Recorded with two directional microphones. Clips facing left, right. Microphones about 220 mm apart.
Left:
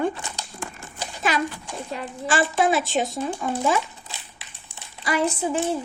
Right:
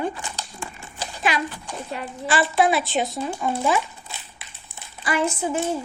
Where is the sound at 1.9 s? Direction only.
45° left (ahead or behind).